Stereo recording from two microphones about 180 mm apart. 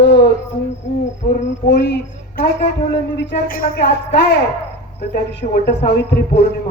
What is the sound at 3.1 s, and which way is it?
A man's voice, 55° left (ahead or behind).